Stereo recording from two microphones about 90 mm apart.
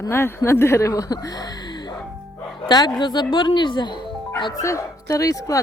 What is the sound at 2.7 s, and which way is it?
Speech, 50° left (ahead or behind).